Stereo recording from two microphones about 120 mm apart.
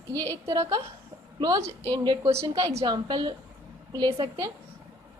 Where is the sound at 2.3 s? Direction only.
25° right (ahead or behind).